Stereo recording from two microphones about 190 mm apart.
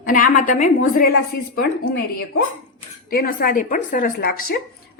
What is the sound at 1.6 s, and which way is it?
A woman's voice, 55° left (ahead or behind).